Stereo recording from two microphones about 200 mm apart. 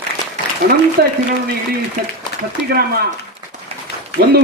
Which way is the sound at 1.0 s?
55° right (ahead or behind).